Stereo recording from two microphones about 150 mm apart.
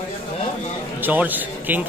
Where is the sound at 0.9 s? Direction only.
10° right (ahead or behind).